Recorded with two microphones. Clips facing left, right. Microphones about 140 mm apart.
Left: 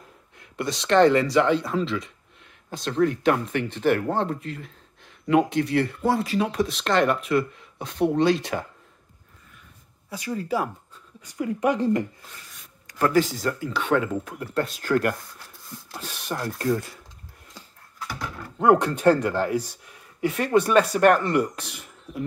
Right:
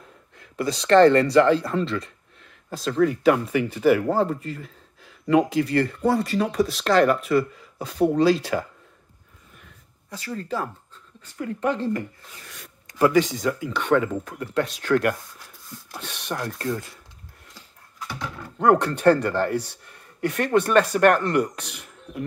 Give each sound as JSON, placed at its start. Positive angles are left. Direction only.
{"t": 0.4, "sound": "speech", "side_deg": 0}
{"t": 10.0, "sound": "speech", "side_deg": 10}
{"t": 13.1, "sound": "speech", "side_deg": 0}
{"t": 18.0, "sound": "typing", "side_deg": 5}
{"t": 19.2, "sound": "speech", "side_deg": 5}